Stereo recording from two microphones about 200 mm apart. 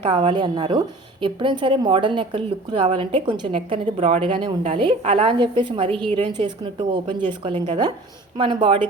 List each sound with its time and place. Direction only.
0.0 s a woman's voice: 25° right (ahead or behind)